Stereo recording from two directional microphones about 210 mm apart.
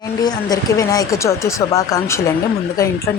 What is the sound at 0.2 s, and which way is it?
Speech, 20° left (ahead or behind).